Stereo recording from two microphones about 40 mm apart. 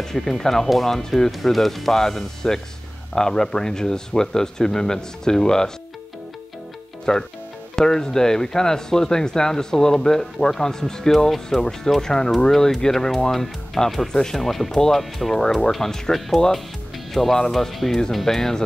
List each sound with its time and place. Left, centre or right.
0.0 s speech: centre
7.1 s speech: centre
15.4 s speech: centre